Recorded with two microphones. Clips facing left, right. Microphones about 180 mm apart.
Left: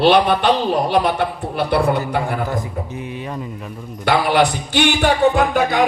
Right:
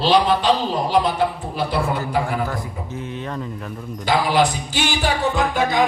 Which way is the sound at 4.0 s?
65° left (ahead or behind).